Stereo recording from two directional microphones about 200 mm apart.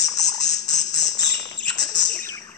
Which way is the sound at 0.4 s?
35° left (ahead or behind).